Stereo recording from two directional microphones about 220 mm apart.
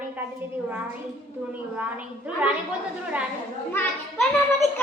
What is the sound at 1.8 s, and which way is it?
Speech, 5° right (ahead or behind).